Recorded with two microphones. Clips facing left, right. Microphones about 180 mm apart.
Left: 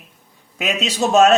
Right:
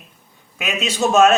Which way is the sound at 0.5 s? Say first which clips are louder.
Left 1 dB; 35° left (ahead or behind).